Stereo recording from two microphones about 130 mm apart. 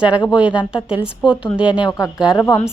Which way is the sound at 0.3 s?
10° right (ahead or behind).